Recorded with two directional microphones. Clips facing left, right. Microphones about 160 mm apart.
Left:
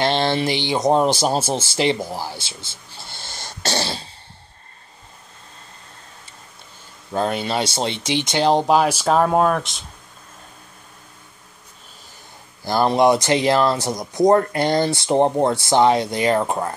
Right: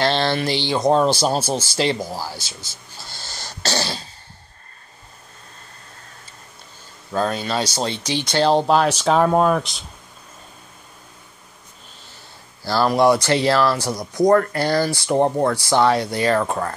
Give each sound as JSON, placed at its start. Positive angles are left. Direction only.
{"t": 0.0, "sound": "speech", "side_deg": 20}
{"t": 7.1, "sound": "speech", "side_deg": 20}
{"t": 12.6, "sound": "speech", "side_deg": 20}